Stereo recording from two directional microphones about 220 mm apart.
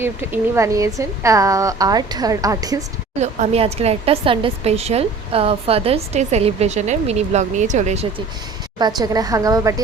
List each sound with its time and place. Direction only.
0.0 s a woman's voice: 10° right (ahead or behind)
3.2 s a woman's voice: 30° right (ahead or behind)
9.0 s a woman's voice: 15° right (ahead or behind)